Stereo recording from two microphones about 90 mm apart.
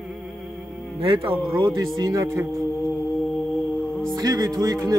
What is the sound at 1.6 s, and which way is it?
Speech, 45° right (ahead or behind).